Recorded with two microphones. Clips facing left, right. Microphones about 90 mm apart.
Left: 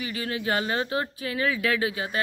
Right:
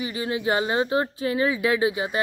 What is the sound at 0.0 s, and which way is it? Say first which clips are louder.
A woman's voice: right 4 dB; 20° right (ahead or behind).